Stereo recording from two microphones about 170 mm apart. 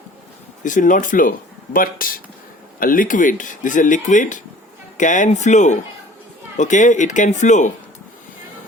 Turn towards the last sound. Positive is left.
turn(degrees=45)  # may be behind; listen again after turning